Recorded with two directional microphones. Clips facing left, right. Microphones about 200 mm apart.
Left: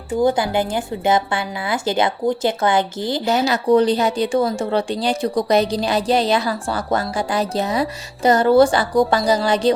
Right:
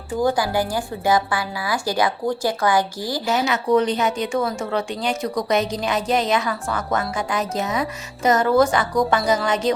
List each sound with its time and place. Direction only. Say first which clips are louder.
0.2 s a woman's voice: left 2 dB; 20° left (ahead or behind)
3.2 s speech: left 3 dB; 35° left (ahead or behind)